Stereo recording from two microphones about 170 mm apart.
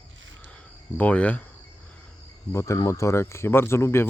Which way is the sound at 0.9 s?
10° left (ahead or behind).